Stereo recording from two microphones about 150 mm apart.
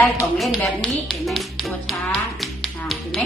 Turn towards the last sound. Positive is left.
turn(degrees=0)  # may be behind; listen again after turning